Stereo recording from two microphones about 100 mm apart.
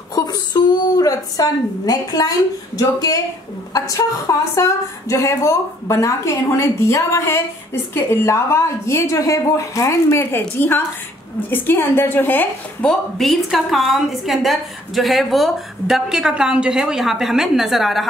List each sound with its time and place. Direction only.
0.1 s a sound: 40° left (ahead or behind)
2.8 s a woman's voice: 35° left (ahead or behind); by 12.9 s 20° left (ahead or behind)
13.2 s a woman's voice: centre (ahead or behind)